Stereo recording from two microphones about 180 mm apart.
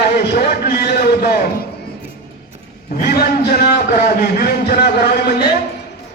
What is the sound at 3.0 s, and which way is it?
A man's voice, 55° left (ahead or behind).